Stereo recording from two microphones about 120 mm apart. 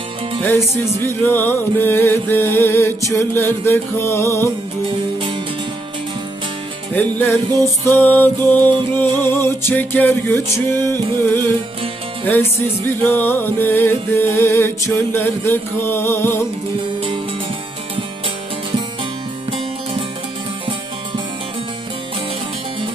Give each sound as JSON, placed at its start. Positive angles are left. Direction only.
{"t": 1.0, "sound": "music", "side_deg": 15}
{"t": 6.9, "sound": "music", "side_deg": 15}